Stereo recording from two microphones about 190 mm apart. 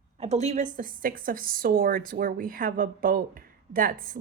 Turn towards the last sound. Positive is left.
turn(degrees=-45)  # may be behind; listen again after turning